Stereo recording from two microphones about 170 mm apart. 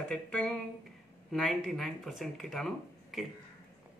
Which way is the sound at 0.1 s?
5° left (ahead or behind).